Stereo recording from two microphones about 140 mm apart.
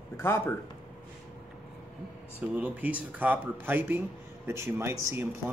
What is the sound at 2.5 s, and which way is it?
Speech, 10° right (ahead or behind).